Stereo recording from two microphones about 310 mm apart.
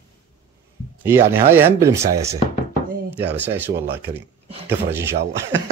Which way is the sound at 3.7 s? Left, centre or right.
Right.